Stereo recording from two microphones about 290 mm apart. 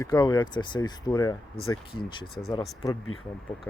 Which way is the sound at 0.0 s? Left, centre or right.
Centre.